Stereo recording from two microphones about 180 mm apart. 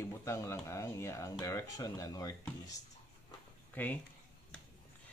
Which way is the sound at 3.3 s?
10° left (ahead or behind).